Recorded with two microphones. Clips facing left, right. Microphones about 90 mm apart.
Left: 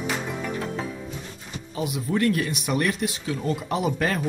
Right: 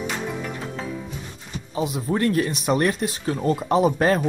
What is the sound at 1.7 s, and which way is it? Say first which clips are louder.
Speech: right 2 dB; 35° right (ahead or behind).